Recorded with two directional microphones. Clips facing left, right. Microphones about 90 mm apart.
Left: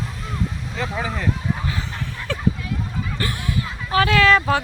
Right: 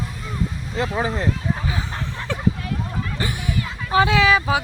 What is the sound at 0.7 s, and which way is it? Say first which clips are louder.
Speech: right 5 dB; 35° right (ahead or behind).